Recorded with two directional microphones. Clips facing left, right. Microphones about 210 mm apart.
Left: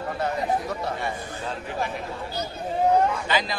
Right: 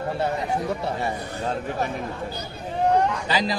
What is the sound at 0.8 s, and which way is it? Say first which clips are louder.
A man's voice: right 2 dB; 40° right (ahead or behind).